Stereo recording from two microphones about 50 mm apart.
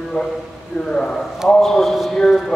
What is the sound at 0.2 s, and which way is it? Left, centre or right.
A man's voice, left.